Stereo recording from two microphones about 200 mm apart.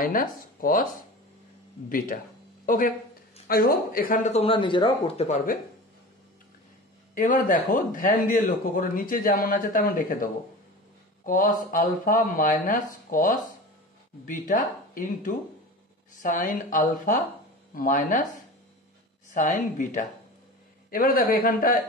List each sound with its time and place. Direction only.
0.0 s a man's voice: 45° left (ahead or behind)
1.9 s a man's voice: 45° left (ahead or behind)
7.2 s a man's voice: 45° left (ahead or behind)
14.5 s a man's voice: 40° left (ahead or behind)